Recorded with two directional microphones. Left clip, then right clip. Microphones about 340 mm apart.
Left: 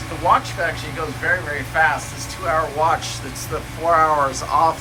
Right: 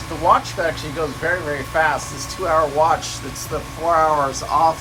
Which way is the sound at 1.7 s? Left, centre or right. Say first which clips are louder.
Left 1 dB; centre.